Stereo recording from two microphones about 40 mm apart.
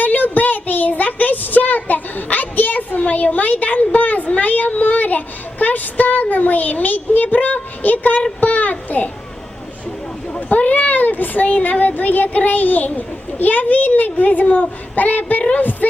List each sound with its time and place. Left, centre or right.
0.0 s child singing: left
2.3 s a sound: left
3.0 s speech: left
8.4 s a sound: left
10.5 s speech: left
15.8 s heart murmur: left